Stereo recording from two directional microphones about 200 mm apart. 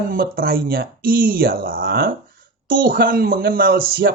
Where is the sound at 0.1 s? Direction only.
45° right (ahead or behind).